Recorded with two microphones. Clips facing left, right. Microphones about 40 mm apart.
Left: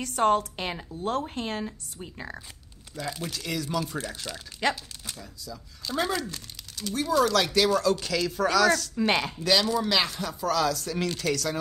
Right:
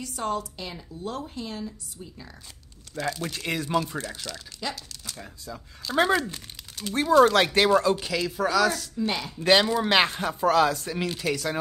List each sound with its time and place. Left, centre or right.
0.0 s a woman's voice: left
2.9 s speech: right
3.3 s speech: right
4.5 s speech: left
5.2 s speech: right; by 8.9 s centre
8.9 s a woman's voice: left
9.4 s speech: right
11.0 s speech: centre